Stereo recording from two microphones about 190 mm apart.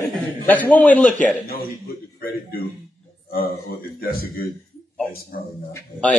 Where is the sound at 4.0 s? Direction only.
50° left (ahead or behind).